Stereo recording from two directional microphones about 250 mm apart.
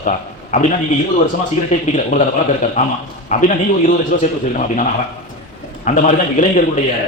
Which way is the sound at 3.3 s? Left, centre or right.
Left.